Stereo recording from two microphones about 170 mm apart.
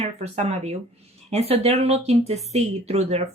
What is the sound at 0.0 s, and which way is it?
A woman's voice, 40° right (ahead or behind).